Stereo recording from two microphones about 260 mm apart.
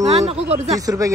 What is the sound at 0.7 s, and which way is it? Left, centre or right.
Speech, centre.